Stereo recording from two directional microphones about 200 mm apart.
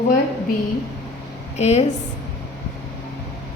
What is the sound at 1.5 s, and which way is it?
Speech, 35° left (ahead or behind).